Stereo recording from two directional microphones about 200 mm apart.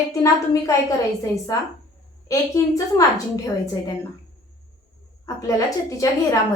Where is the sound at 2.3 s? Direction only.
15° left (ahead or behind).